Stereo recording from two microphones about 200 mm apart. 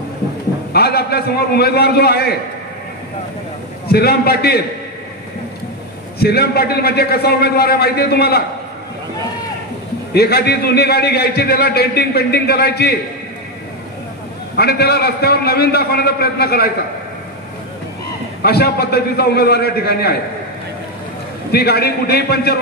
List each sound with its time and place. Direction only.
0.7 s a man's voice: 50° left (ahead or behind)
3.9 s a man's voice: 50° left (ahead or behind)
6.1 s a man's voice: 50° left (ahead or behind)
10.1 s a man's voice: 50° left (ahead or behind)
14.6 s a man's voice: 50° left (ahead or behind)
18.4 s a man's voice: 50° left (ahead or behind)
21.5 s a man's voice: 50° left (ahead or behind)